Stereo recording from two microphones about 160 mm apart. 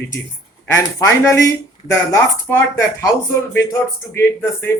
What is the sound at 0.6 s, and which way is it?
Speech, 15° left (ahead or behind).